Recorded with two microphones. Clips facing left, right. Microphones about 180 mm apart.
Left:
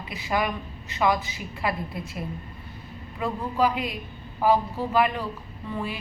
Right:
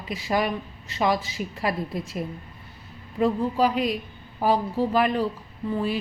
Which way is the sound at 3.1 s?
40° right (ahead or behind).